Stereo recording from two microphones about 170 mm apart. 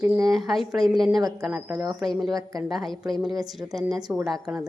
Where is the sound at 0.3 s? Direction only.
Centre (ahead or behind).